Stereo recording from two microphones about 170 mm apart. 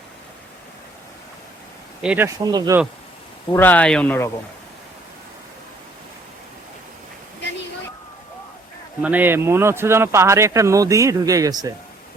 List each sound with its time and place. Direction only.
2.0 s speech: 10° right (ahead or behind)
2.4 s speech: 20° right (ahead or behind)
3.5 s speech: 10° left (ahead or behind)
9.0 s speech: 10° right (ahead or behind)